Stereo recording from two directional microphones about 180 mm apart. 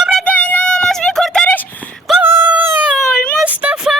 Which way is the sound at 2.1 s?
10° right (ahead or behind).